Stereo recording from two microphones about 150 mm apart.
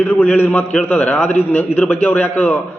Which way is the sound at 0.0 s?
10° left (ahead or behind).